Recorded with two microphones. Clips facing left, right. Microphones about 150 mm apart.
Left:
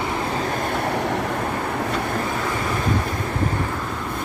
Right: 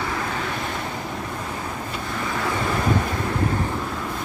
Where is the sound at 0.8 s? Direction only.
75° left (ahead or behind).